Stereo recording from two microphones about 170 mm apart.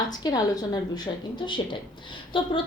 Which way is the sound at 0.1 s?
25° left (ahead or behind).